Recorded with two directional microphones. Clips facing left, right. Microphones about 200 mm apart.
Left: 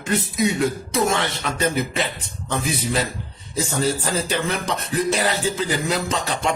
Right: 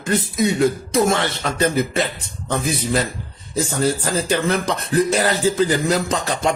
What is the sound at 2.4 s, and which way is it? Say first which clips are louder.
Speech: right 3 dB; 45° right (ahead or behind).